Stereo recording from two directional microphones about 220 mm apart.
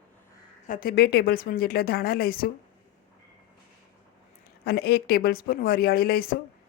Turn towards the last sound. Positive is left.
turn(degrees=45)  # may be behind; listen again after turning